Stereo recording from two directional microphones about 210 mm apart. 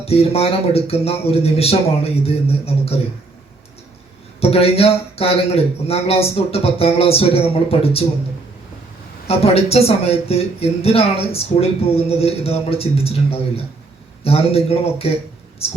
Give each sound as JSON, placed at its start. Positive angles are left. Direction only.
{"t": 0.0, "sound": "speech", "side_deg": 30}
{"t": 4.4, "sound": "speech", "side_deg": 30}
{"t": 9.2, "sound": "speech", "side_deg": 30}